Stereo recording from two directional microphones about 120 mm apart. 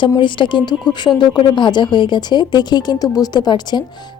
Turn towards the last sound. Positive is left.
turn(degrees=35)  # may be behind; listen again after turning